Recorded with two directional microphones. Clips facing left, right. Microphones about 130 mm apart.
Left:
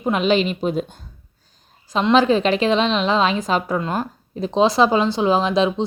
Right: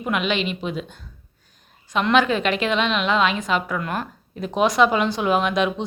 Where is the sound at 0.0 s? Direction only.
35° left (ahead or behind).